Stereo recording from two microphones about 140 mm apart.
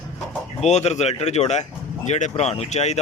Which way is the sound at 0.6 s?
50° left (ahead or behind).